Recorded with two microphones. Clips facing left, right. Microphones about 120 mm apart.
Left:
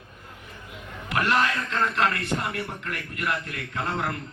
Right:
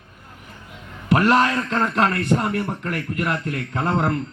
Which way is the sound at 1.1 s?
40° right (ahead or behind).